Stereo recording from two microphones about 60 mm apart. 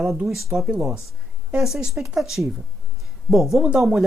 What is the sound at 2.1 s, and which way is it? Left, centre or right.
Speech, centre.